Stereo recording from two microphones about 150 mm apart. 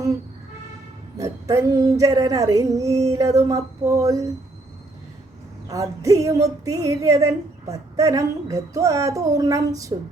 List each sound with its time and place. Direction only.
1.2 s a woman's voice: 20° right (ahead or behind)
5.6 s a woman's voice: 20° right (ahead or behind)